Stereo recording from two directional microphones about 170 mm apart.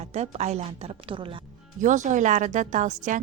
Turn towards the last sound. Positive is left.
turn(degrees=-45)  # may be behind; listen again after turning